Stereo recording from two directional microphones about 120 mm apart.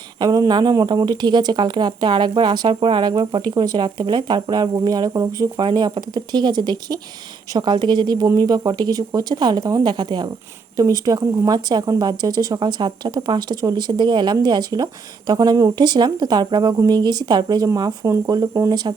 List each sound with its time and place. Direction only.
0.2 s speech: 30° right (ahead or behind)